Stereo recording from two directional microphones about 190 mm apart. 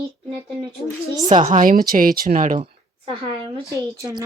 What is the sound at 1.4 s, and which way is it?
A woman's voice, 40° right (ahead or behind).